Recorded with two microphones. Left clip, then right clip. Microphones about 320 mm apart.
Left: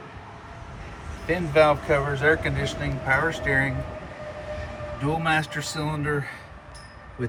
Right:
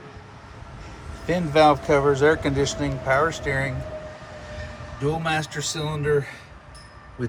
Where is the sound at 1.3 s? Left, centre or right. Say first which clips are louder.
Right 2 dB; right.